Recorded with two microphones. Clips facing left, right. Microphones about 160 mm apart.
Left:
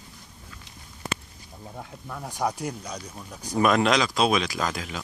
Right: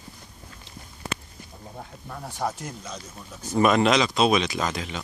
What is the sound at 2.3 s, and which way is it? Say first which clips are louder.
Speech: left 2 dB; 15° left (ahead or behind).